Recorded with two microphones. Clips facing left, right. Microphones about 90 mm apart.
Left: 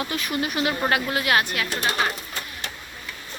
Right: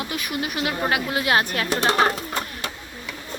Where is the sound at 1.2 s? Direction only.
25° right (ahead or behind).